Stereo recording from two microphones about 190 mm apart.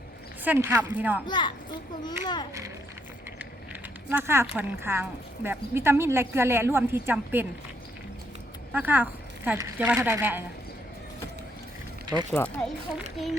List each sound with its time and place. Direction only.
0.4 s speech: 10° right (ahead or behind)
1.3 s a child's voice: 25° left (ahead or behind)
3.3 s speech: 10° right (ahead or behind)
8.7 s speech: 10° right (ahead or behind)
12.3 s speech: 10° left (ahead or behind)